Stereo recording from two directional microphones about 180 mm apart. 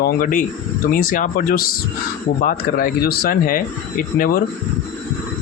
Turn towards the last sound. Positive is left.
turn(degrees=55)  # may be behind; listen again after turning